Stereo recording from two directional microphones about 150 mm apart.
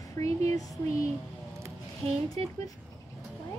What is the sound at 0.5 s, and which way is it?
Speech, 25° left (ahead or behind).